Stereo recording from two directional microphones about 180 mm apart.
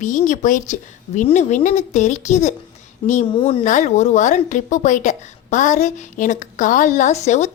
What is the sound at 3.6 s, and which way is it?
A woman's voice, 40° left (ahead or behind).